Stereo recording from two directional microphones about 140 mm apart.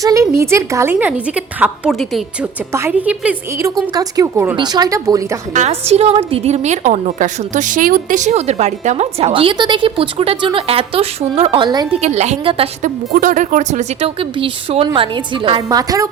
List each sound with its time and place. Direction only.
0.0 s a woman's voice: 20° right (ahead or behind)
3.9 s speech: 25° right (ahead or behind)
5.5 s a woman's voice: 50° right (ahead or behind); by 11.9 s 30° right (ahead or behind)
11.9 s a woman's voice: 50° right (ahead or behind)
12.8 s speech: 70° right (ahead or behind)
14.2 s a woman's voice: 40° right (ahead or behind)